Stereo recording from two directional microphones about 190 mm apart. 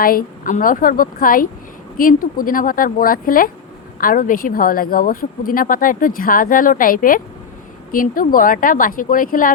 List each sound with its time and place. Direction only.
0.0 s speech: 50° left (ahead or behind)